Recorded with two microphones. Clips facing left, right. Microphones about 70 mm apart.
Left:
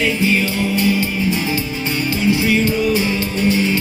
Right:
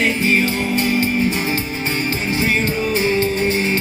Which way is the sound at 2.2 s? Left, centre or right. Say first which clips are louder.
Left 5 dB; right.